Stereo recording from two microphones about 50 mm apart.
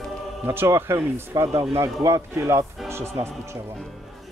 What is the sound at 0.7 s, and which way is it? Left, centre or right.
Speech, right.